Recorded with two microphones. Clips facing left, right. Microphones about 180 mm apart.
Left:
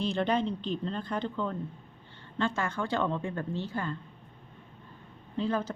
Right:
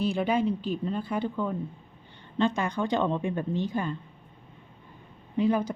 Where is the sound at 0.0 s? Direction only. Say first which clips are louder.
Right 3 dB; 5° right (ahead or behind).